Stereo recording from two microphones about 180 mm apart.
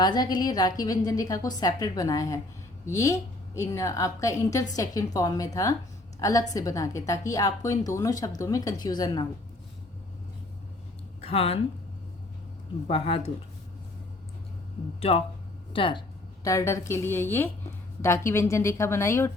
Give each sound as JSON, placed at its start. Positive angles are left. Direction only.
{"t": 0.0, "sound": "a woman's voice", "side_deg": 20}
{"t": 11.2, "sound": "a woman's voice", "side_deg": 35}
{"t": 12.9, "sound": "speech", "side_deg": 30}
{"t": 15.1, "sound": "a woman's voice", "side_deg": 35}